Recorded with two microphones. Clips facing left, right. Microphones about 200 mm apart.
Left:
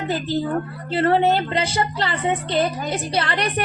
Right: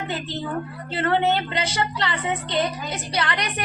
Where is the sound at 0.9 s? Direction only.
35° left (ahead or behind).